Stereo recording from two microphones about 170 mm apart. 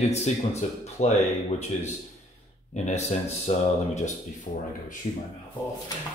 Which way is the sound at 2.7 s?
40° left (ahead or behind).